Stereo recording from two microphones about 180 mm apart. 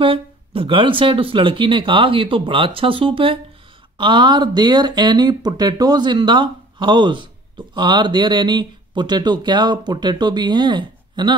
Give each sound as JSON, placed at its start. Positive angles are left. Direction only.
{"t": 0.0, "sound": "speech", "side_deg": -30}